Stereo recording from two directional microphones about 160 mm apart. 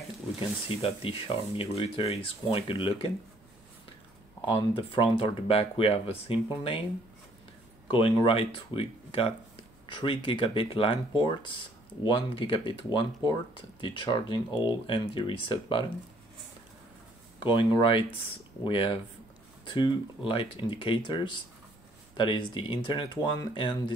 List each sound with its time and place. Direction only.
0.4 s speech: 35° left (ahead or behind)
4.5 s speech: 35° left (ahead or behind)
7.9 s speech: 35° left (ahead or behind)
17.4 s speech: 30° left (ahead or behind)